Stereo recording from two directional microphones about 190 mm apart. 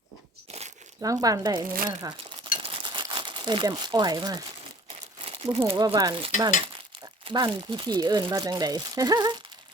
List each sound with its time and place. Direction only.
1.0 s speech: 20° right (ahead or behind)
2.0 s crumpling: 20° right (ahead or behind)
4.9 s crumpling: 30° right (ahead or behind)
5.5 s speech: 25° right (ahead or behind)